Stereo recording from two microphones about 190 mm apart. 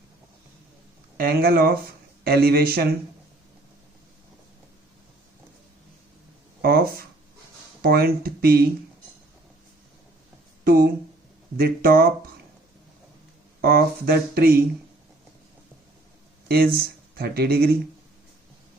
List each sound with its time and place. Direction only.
1.1 s speech: 55° right (ahead or behind)
6.6 s speech: 50° right (ahead or behind)
10.6 s speech: 50° right (ahead or behind)
13.6 s speech: 50° right (ahead or behind)
17.2 s speech: 55° right (ahead or behind)